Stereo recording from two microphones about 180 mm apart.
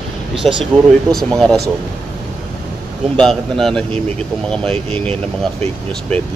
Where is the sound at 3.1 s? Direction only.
Centre (ahead or behind).